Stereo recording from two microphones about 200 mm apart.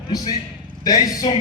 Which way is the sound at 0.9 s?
20° left (ahead or behind).